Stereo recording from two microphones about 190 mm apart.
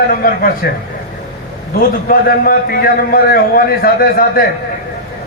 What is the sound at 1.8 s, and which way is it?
A man's voice, 50° left (ahead or behind).